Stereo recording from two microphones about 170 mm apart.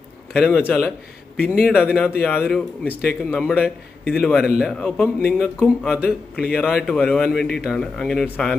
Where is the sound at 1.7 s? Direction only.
5° right (ahead or behind).